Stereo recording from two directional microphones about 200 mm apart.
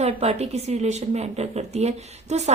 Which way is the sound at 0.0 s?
30° right (ahead or behind).